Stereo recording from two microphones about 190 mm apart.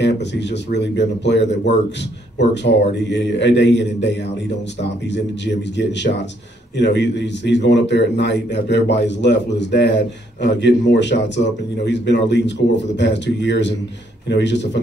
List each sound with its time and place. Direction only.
0.0 s a man's voice: 65° left (ahead or behind)